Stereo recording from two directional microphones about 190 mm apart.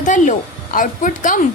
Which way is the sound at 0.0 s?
40° left (ahead or behind).